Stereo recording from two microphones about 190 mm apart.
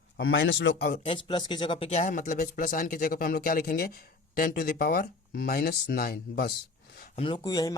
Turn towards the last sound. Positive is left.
turn(degrees=20)  # may be behind; listen again after turning